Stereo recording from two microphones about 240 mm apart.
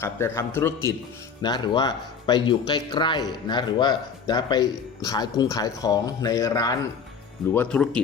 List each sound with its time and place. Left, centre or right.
0.0 s speech: centre